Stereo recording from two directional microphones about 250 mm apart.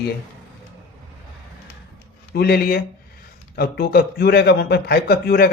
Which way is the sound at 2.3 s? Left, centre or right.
Left.